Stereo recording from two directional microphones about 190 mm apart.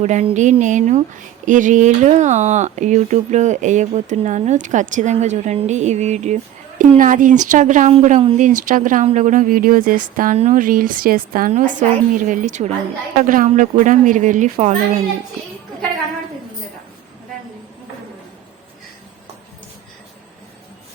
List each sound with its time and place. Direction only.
0.0 s speech: 35° right (ahead or behind)